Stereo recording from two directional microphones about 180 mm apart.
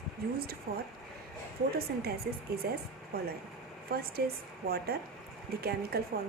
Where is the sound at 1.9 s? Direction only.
60° right (ahead or behind).